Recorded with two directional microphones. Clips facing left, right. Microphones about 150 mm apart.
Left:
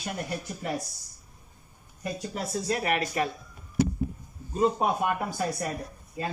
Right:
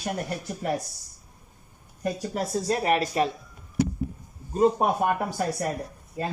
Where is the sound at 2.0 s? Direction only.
45° right (ahead or behind).